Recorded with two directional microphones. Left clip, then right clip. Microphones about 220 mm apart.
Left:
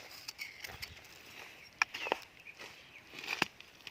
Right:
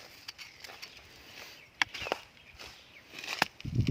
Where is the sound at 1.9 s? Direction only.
10° left (ahead or behind).